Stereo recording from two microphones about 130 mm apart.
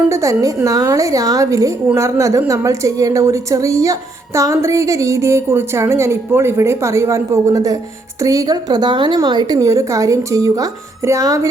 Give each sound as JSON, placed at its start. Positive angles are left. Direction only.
{"t": 0.1, "sound": "a woman's voice", "side_deg": -25}